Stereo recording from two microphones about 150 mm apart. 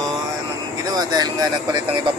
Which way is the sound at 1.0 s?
25° right (ahead or behind).